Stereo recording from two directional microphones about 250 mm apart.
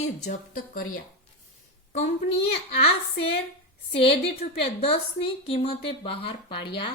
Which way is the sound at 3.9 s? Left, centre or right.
Left.